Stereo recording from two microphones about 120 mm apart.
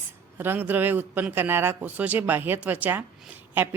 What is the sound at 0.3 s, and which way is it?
Speech, 15° right (ahead or behind).